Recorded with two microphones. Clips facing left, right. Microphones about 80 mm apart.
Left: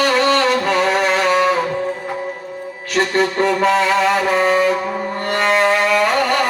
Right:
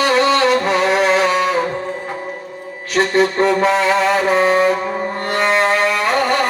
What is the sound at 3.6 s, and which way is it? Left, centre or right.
Music, right.